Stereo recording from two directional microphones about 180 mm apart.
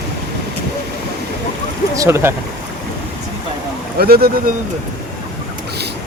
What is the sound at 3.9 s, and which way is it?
Speech, 60° right (ahead or behind).